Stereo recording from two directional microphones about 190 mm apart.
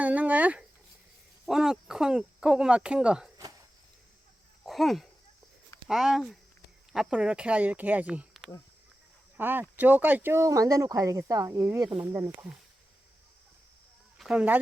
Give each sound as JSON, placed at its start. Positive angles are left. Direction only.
{"t": 0.0, "sound": "a sound", "side_deg": -10}
{"t": 1.5, "sound": "speech", "side_deg": -5}
{"t": 4.6, "sound": "speech", "side_deg": 0}
{"t": 14.2, "sound": "speech", "side_deg": -5}